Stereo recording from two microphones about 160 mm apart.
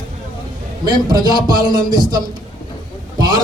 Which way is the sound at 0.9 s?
25° right (ahead or behind).